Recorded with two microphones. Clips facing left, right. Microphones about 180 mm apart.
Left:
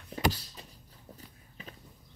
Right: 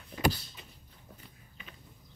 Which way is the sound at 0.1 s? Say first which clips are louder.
Right 1 dB; 35° left (ahead or behind).